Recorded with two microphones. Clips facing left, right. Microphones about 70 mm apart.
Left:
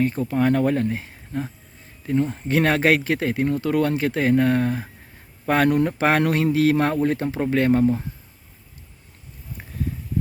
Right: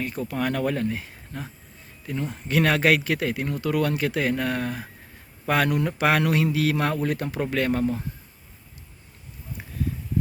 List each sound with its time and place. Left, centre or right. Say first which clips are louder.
0.0 s speech: left 7 dB; left